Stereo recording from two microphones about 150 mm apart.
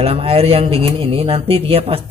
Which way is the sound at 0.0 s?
40° right (ahead or behind).